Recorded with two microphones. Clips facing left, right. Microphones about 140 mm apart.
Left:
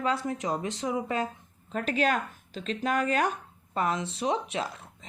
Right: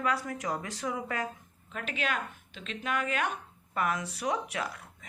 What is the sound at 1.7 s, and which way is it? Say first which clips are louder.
Speech: left 7 dB; 40° left (ahead or behind).